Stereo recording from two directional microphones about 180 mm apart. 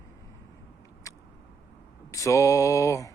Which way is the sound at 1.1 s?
15° left (ahead or behind).